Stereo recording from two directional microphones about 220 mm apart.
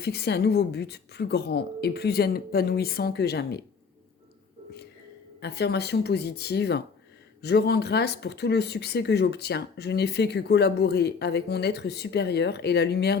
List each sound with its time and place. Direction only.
0.0 s speech: 50° left (ahead or behind)
5.4 s speech: 50° left (ahead or behind)